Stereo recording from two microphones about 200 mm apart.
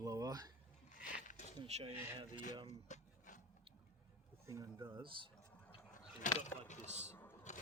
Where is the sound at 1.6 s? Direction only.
35° right (ahead or behind).